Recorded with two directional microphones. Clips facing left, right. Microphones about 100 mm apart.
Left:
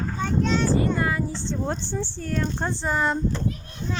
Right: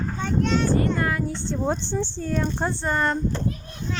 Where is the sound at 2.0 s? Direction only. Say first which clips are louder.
Right 2 dB; 20° right (ahead or behind).